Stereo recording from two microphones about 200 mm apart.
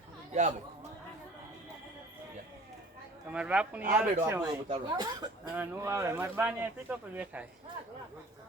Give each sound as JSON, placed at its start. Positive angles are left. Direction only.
{"t": 0.3, "sound": "chatter", "side_deg": -35}
{"t": 3.3, "sound": "speech", "side_deg": -5}
{"t": 5.5, "sound": "speech", "side_deg": -10}